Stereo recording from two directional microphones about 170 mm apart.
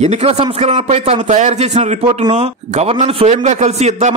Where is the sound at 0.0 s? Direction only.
40° right (ahead or behind).